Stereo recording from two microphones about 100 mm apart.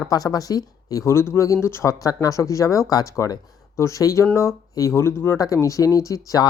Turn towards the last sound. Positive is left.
turn(degrees=35)  # may be behind; listen again after turning